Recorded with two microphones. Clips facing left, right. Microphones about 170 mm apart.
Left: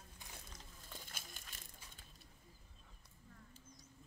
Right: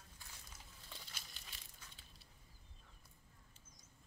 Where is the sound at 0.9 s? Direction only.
50° left (ahead or behind).